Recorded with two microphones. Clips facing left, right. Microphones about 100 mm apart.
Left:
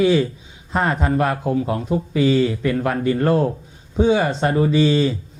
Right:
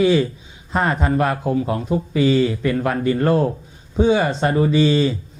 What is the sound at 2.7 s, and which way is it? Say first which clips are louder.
Speech: even; 10° right (ahead or behind).